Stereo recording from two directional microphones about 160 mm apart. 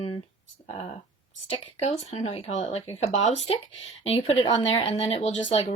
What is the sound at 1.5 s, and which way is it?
Speech, 40° left (ahead or behind).